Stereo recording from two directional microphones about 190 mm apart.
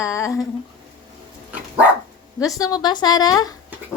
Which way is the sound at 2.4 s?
20° left (ahead or behind).